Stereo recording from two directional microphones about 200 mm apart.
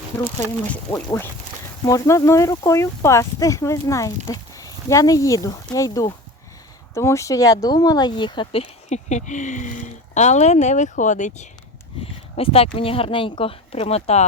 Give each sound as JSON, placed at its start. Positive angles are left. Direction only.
{"t": 0.9, "sound": "speech", "side_deg": 10}
{"t": 12.4, "sound": "speech", "side_deg": 30}